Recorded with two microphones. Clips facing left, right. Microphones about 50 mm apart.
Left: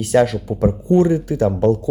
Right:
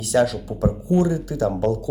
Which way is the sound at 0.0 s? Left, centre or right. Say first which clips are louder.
Left 4 dB; left.